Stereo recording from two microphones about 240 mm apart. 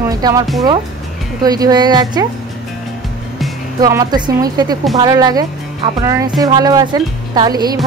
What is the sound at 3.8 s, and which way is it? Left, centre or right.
A woman's voice, centre.